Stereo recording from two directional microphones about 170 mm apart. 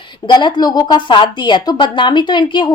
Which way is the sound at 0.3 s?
25° left (ahead or behind).